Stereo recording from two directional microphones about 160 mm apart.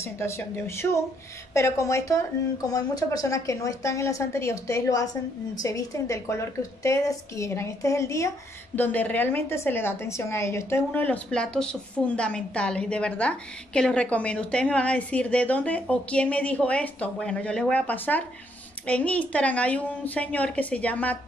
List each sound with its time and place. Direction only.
0.0 s a woman's voice: 15° left (ahead or behind)